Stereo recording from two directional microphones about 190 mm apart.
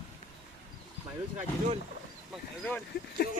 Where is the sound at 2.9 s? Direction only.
55° left (ahead or behind).